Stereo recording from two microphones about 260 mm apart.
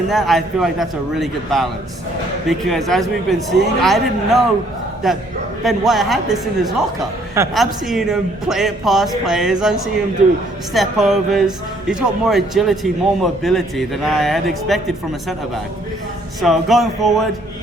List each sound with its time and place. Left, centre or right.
0.1 s a man's voice: centre
7.5 s a man's voice: centre
16.4 s a man's voice: centre